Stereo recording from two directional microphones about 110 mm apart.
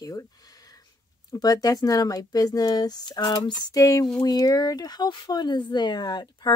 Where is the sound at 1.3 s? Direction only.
35° left (ahead or behind).